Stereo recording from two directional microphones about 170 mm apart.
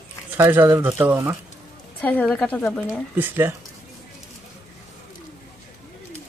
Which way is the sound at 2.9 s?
10° right (ahead or behind).